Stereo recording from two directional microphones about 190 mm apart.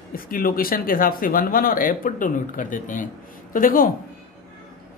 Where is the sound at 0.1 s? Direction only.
50° left (ahead or behind).